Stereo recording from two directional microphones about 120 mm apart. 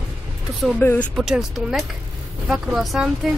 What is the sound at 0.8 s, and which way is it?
Speech, 15° left (ahead or behind).